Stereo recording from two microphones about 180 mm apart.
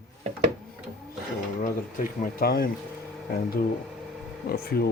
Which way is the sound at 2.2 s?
55° left (ahead or behind).